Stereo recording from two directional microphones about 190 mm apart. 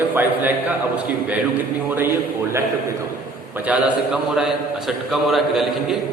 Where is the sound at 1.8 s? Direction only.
10° right (ahead or behind).